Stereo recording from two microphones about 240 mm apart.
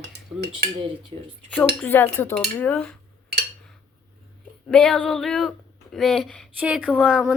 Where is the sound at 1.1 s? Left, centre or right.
Right.